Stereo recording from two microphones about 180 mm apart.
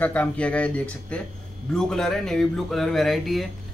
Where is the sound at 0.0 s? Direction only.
10° left (ahead or behind).